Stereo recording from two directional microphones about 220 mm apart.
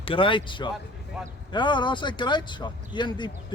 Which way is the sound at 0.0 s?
25° left (ahead or behind).